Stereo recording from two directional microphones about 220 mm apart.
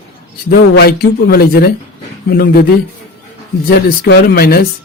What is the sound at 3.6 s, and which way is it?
A man's voice, 45° left (ahead or behind).